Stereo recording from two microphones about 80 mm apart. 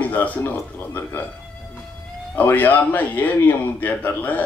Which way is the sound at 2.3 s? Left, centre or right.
Left.